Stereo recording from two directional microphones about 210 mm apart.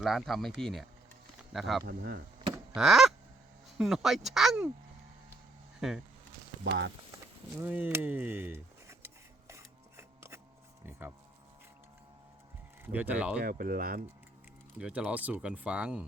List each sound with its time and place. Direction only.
0.0 s speech: centre (ahead or behind)
1.8 s speech: 45° right (ahead or behind)
2.7 s honk: centre (ahead or behind)
3.8 s speech: centre (ahead or behind)
6.7 s speech: 55° right (ahead or behind)
7.6 s a sound: 10° right (ahead or behind)
12.8 s speech: 10° right (ahead or behind)
13.4 s speech: 45° right (ahead or behind)
14.8 s speech: 5° right (ahead or behind)